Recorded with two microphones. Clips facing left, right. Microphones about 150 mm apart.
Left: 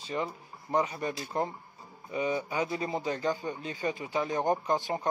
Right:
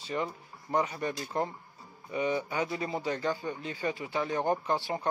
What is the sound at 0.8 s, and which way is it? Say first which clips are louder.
Speech: even; 30° left (ahead or behind).